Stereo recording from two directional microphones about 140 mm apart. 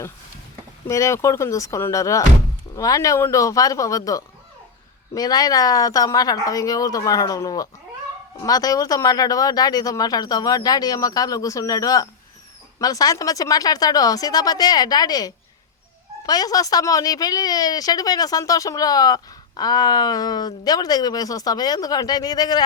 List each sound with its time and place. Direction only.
0.9 s a woman's voice: 20° left (ahead or behind)